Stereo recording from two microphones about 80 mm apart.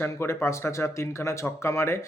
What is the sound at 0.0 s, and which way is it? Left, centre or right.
A man's voice, left.